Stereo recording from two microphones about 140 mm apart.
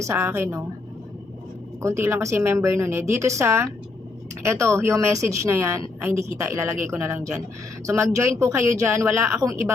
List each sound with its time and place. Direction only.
0.0 s speech: 20° right (ahead or behind)
1.8 s speech: 20° right (ahead or behind)